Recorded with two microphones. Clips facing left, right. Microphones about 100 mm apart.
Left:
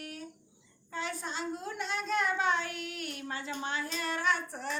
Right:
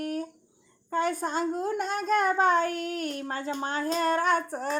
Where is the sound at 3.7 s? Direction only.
45° right (ahead or behind).